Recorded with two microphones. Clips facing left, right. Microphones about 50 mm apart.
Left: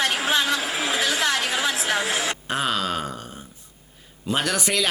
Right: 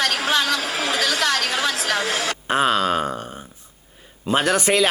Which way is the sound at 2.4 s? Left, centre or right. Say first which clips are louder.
Right 9 dB; right.